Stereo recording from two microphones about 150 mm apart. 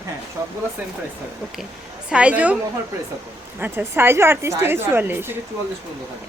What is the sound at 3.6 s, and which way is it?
A woman's voice, 15° right (ahead or behind).